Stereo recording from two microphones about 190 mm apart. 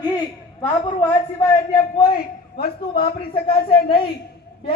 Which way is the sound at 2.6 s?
55° left (ahead or behind).